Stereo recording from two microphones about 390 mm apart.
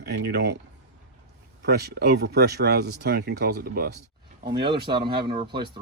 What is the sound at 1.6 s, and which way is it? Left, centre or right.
Speech, right.